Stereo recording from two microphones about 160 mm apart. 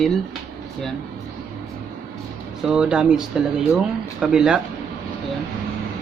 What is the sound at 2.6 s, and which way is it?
Speech, 5° right (ahead or behind).